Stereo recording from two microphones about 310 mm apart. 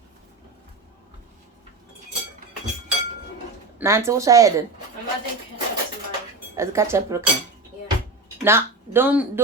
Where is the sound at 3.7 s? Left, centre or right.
Centre.